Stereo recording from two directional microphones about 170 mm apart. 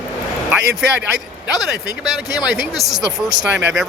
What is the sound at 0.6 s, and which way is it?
Speech, 85° right.